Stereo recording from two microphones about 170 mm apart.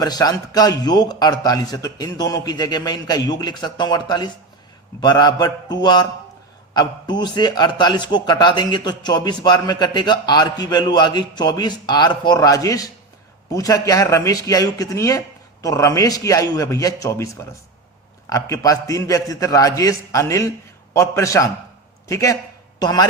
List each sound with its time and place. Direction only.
0.0 s a man's voice: 25° left (ahead or behind)